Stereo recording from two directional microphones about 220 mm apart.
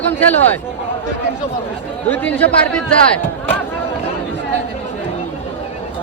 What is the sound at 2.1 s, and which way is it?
Speech, 10° left (ahead or behind).